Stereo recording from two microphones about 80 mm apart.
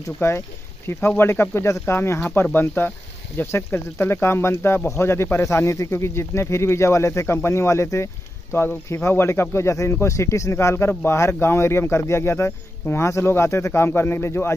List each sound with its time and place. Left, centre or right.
0.2 s speech: left